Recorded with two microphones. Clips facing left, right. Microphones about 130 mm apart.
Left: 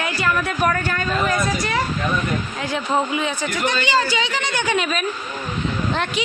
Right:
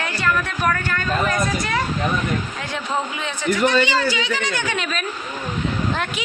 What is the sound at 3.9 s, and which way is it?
A woman's voice, 25° left (ahead or behind).